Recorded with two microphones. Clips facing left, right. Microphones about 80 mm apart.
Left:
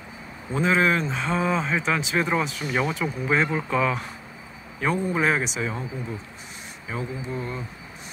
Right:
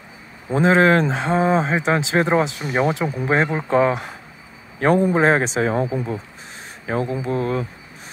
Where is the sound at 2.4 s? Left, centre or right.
Right.